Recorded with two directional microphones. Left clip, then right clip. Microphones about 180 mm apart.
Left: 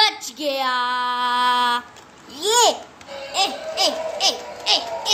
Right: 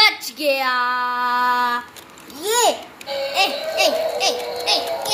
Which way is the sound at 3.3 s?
15° left (ahead or behind).